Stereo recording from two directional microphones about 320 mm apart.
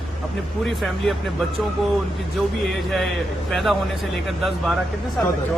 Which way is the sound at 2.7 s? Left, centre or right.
Centre.